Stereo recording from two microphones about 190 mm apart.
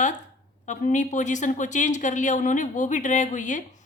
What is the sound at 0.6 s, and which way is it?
A woman's voice, 40° left (ahead or behind).